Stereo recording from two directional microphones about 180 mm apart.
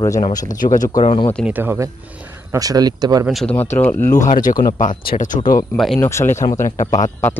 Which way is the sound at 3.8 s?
10° left (ahead or behind).